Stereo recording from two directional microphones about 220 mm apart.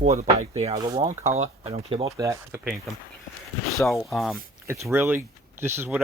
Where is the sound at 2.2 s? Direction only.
10° right (ahead or behind).